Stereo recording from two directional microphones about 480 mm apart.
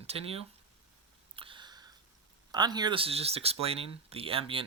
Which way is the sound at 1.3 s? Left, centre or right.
Centre.